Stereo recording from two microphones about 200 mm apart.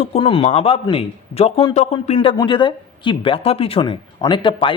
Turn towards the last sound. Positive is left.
turn(degrees=25)  # may be behind; listen again after turning